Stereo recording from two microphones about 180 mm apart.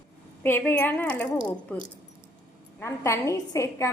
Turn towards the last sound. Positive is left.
turn(degrees=15)  # may be behind; listen again after turning